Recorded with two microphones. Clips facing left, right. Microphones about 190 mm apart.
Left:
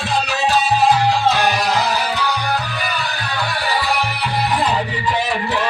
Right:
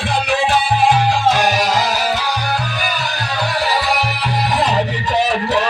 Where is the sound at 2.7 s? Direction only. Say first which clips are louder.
Right 2 dB; 90° right.